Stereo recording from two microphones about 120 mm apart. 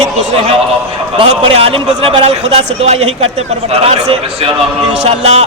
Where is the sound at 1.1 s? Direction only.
50° right (ahead or behind).